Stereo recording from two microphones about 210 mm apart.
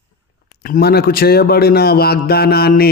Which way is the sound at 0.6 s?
45° left (ahead or behind).